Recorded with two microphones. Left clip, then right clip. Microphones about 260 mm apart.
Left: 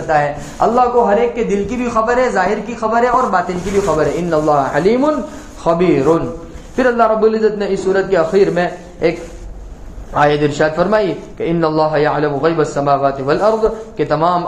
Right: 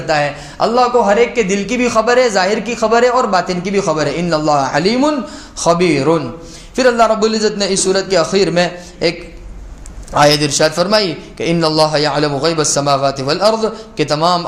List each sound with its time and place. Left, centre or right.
0.1 s a man's voice: right
10.2 s a man's voice: right